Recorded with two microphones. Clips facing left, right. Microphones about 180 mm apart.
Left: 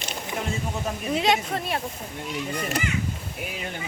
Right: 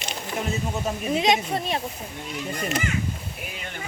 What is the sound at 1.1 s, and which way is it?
Speech, 15° right (ahead or behind).